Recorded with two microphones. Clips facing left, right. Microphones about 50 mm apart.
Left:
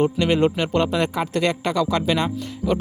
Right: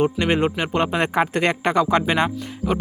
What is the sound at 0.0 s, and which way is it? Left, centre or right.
Speech, right.